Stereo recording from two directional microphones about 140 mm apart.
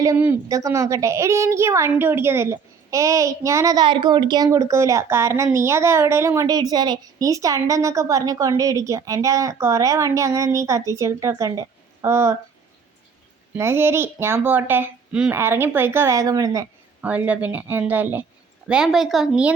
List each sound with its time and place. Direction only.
0.4 s a woman's voice: 25° right (ahead or behind)
13.5 s speech: 20° right (ahead or behind)
17.0 s a woman's voice: 10° right (ahead or behind)